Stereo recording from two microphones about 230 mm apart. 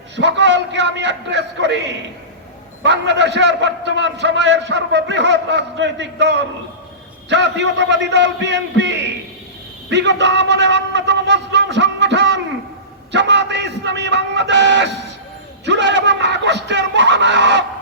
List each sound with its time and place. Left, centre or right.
0.2 s a man's voice: right
13.1 s music: right
15.6 s screaming: right